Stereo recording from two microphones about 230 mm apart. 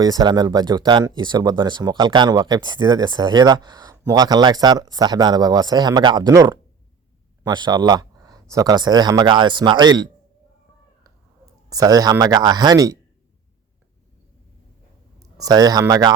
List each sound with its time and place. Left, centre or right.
0.0 s speech: centre
11.7 s speech: centre
15.2 s speech: centre